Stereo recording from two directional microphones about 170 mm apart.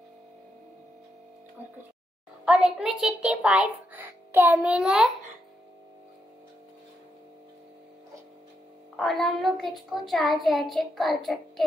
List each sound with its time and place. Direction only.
2.4 s a child's voice: 5° right (ahead or behind)
8.9 s a child's voice: centre (ahead or behind)